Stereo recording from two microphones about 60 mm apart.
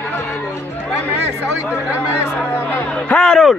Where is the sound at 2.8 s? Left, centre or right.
Centre.